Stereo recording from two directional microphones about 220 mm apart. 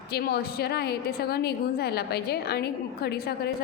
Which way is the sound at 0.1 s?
45° left (ahead or behind).